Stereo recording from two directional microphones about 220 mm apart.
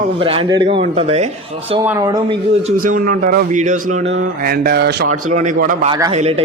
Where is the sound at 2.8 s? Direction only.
40° right (ahead or behind).